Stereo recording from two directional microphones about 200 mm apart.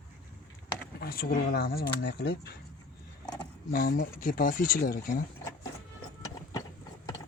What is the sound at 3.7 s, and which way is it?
Speech, 50° left (ahead or behind).